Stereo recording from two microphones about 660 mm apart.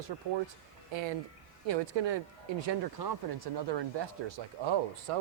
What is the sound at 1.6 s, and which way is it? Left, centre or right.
Speech, right.